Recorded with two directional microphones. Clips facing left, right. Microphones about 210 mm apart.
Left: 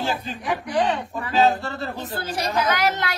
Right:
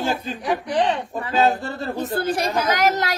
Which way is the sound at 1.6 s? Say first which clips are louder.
Right 4 dB; 45° right (ahead or behind).